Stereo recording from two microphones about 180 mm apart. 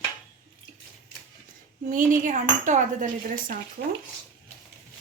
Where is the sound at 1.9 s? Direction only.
50° right (ahead or behind).